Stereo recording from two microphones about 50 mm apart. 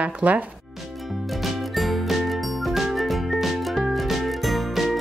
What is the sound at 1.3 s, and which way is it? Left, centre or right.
Jingle, centre.